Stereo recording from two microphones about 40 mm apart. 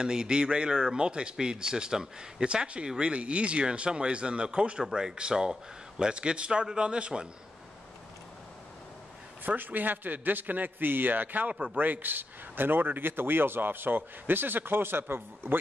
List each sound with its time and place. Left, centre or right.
0.0 s speech: centre
9.6 s a man's voice: right